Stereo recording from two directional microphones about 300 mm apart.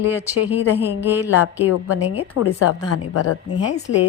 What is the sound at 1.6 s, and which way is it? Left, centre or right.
A woman's voice, left.